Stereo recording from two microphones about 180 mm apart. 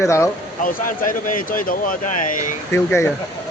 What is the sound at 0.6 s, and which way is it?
Speech, 50° left (ahead or behind).